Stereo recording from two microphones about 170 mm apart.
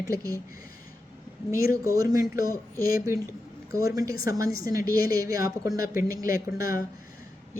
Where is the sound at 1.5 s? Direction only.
20° right (ahead or behind).